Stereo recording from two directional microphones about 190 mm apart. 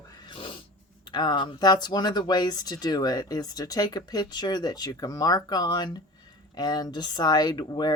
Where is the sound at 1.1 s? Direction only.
25° left (ahead or behind).